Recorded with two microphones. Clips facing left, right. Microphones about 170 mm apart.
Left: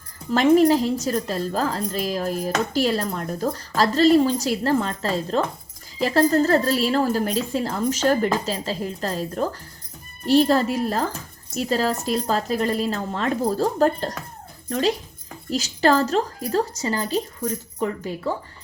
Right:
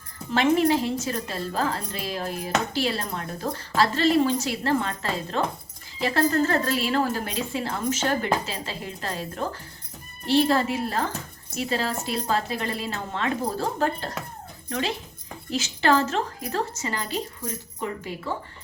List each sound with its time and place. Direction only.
0.3 s a woman's voice: 40° left (ahead or behind)